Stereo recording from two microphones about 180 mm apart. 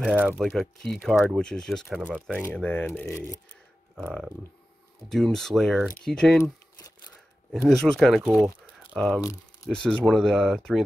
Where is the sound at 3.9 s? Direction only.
Centre (ahead or behind).